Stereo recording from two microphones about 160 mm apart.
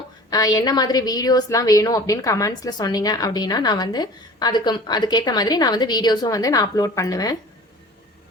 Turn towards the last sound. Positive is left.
turn(degrees=20)  # may be behind; listen again after turning